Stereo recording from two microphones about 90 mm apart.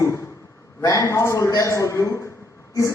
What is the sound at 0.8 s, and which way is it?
A man's voice, 35° left (ahead or behind).